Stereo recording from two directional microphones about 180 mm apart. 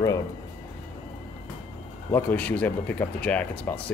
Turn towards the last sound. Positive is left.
turn(degrees=10)  # may be behind; listen again after turning